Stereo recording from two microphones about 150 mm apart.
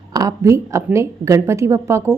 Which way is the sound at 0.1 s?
20° right (ahead or behind).